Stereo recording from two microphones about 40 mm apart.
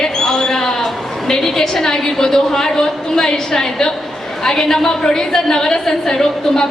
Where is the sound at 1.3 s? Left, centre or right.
Centre.